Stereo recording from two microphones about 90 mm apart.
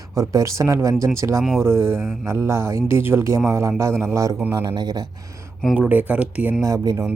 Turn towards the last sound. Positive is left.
turn(degrees=-40)  # may be behind; listen again after turning